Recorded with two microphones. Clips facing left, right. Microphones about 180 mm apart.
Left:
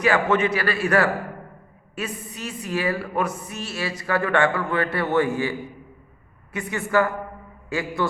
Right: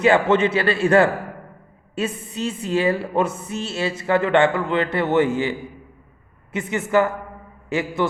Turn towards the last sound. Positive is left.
turn(degrees=-20)  # may be behind; listen again after turning